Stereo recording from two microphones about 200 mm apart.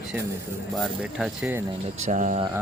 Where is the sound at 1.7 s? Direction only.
35° right (ahead or behind).